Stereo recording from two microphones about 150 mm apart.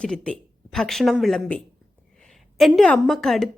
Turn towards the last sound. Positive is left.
turn(degrees=0)  # may be behind; listen again after turning